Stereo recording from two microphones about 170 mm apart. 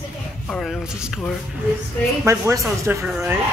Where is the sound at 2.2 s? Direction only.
15° right (ahead or behind).